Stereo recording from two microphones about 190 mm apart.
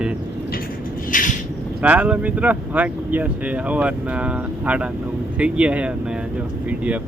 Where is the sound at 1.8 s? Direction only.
10° right (ahead or behind).